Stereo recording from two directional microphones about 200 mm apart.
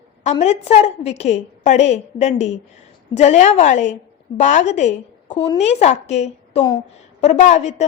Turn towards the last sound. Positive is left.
turn(degrees=35)  # may be behind; listen again after turning